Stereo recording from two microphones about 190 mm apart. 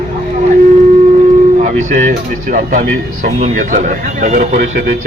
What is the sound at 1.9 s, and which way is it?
Speech, 45° right (ahead or behind).